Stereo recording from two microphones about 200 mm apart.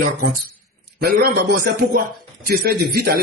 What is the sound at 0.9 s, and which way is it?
Speech, 50° right (ahead or behind).